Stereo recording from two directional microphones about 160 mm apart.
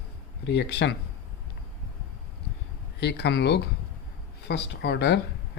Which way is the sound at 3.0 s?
90° left.